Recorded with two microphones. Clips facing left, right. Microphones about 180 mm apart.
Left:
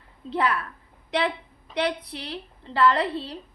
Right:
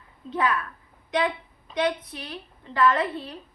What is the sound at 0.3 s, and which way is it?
Speech, 30° left (ahead or behind).